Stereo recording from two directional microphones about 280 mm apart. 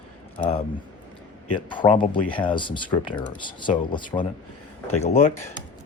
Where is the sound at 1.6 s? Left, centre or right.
Centre.